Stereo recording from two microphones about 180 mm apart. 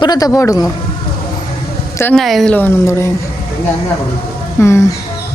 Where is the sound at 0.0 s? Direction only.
20° left (ahead or behind).